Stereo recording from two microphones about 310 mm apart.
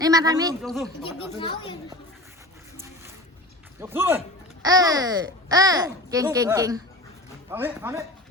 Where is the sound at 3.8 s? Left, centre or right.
Centre.